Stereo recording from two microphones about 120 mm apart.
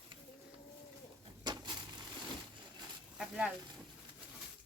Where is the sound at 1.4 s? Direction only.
35° right (ahead or behind).